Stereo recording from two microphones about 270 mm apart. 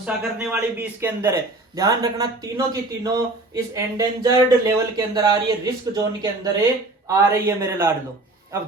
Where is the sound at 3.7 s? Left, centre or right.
Centre.